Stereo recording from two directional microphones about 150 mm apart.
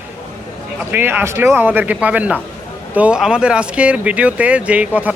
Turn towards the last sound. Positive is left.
turn(degrees=-10)  # may be behind; listen again after turning